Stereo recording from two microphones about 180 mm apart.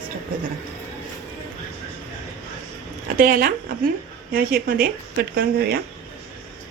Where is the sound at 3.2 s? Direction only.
50° right (ahead or behind).